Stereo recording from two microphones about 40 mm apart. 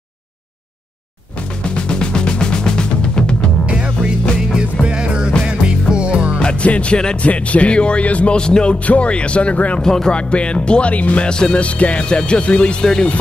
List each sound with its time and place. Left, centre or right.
1.6 s music: left
3.7 s music: right
6.4 s music: left
7.2 s speech: left
8.4 s speech: left
8.7 s speech: left
9.8 s speech: centre
10.1 s speech: left
11.2 s speech: left